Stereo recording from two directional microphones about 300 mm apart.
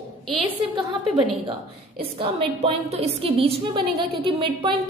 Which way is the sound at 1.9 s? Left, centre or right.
Centre.